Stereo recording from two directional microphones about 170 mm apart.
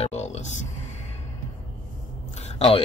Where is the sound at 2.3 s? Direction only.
40° left (ahead or behind).